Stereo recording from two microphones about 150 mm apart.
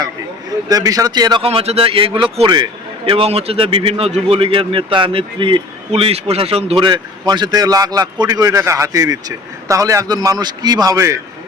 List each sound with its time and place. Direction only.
0.7 s a man's voice: 25° right (ahead or behind)
1.5 s a man's voice: 40° right (ahead or behind); by 11.2 s 20° right (ahead or behind)